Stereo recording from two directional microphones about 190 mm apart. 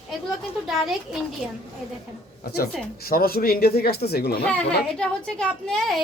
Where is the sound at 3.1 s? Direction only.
50° left (ahead or behind).